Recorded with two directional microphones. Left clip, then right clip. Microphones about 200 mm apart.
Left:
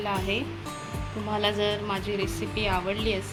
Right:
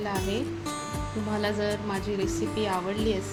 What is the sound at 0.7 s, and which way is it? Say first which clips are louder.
Music: right 3 dB; centre (ahead or behind).